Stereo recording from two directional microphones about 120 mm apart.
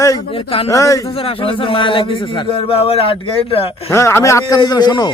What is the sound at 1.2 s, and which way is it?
Speech, 50° left (ahead or behind).